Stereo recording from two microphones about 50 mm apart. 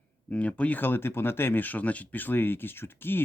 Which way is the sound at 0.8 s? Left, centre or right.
Left.